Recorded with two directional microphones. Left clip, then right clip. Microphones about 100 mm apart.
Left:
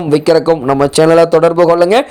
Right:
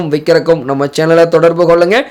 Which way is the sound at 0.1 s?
50° left (ahead or behind).